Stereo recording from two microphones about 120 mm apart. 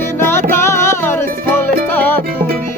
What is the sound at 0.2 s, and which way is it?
Music, 20° left (ahead or behind).